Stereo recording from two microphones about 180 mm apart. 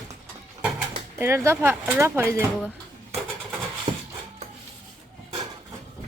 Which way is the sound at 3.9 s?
25° right (ahead or behind).